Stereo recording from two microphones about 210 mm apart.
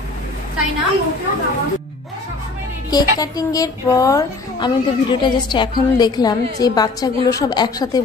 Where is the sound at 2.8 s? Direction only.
20° left (ahead or behind).